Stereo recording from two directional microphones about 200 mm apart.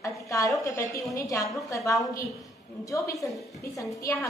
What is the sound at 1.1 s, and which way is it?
Speech, 15° left (ahead or behind).